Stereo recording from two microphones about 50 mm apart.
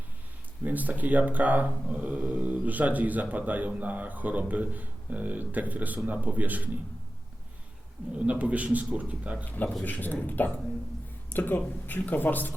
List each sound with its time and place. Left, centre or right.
0.6 s speech: right
8.2 s speech: right
9.4 s speech: left